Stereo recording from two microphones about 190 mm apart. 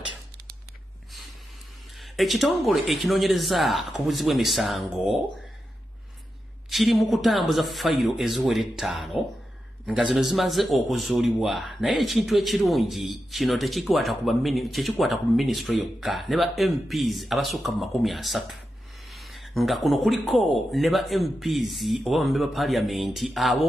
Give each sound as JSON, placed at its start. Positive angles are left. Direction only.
{"t": 2.0, "sound": "a man's voice", "side_deg": 0}
{"t": 6.7, "sound": "a man's voice", "side_deg": 0}